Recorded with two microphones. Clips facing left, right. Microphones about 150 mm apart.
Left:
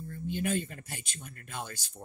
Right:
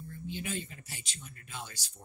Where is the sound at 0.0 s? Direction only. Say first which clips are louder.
Left 6 dB; 50° left (ahead or behind).